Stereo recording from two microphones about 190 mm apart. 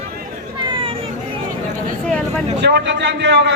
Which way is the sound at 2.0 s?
5° left (ahead or behind).